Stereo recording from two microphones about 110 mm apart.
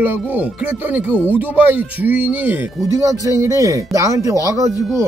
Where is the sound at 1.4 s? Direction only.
15° right (ahead or behind).